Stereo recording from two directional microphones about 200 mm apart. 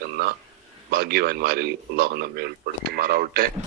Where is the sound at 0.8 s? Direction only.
50° right (ahead or behind).